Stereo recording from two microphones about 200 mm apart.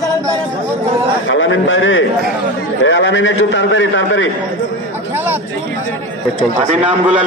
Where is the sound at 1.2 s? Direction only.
70° left (ahead or behind).